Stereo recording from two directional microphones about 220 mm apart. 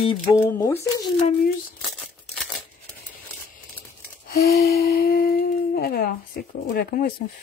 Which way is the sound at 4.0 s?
45° left (ahead or behind).